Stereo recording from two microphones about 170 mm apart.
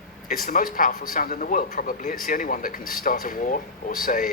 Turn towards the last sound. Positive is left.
turn(degrees=55)  # may be behind; listen again after turning